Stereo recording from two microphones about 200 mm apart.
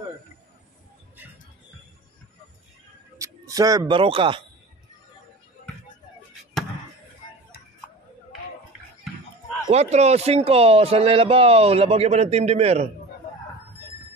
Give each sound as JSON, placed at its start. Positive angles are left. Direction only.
{"t": 3.2, "sound": "speech", "side_deg": -15}
{"t": 9.7, "sound": "speech", "side_deg": -35}